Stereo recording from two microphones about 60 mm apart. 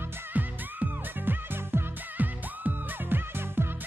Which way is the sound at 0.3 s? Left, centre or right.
Right.